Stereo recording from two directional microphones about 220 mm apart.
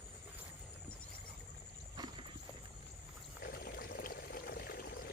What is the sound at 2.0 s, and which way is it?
Horse, 20° right (ahead or behind).